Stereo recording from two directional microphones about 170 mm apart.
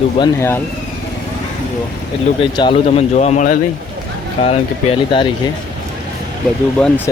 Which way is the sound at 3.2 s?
45° left (ahead or behind).